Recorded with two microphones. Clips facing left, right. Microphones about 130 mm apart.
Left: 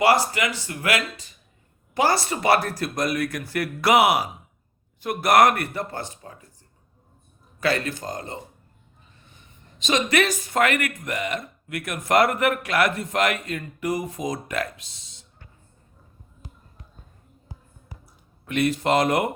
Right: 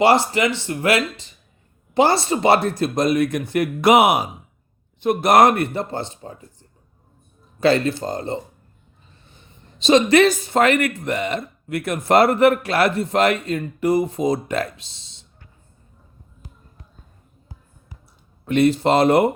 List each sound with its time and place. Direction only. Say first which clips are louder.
0.0 s speech: right 4 dB; 25° right (ahead or behind)
18.4 s speech: right 6 dB; 30° right (ahead or behind)